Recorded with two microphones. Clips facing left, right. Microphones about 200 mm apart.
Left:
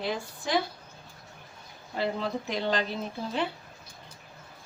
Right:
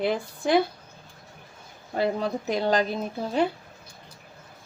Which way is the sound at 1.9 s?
45° right (ahead or behind).